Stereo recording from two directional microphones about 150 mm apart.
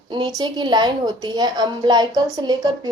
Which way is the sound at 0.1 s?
30° right (ahead or behind).